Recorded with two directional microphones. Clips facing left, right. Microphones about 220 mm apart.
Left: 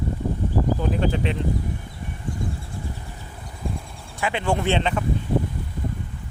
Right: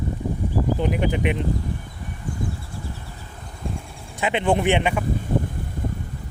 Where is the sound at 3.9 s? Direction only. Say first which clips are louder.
Right 4 dB; 15° right (ahead or behind).